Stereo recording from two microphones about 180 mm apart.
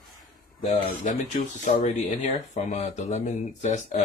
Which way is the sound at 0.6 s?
45° left (ahead or behind).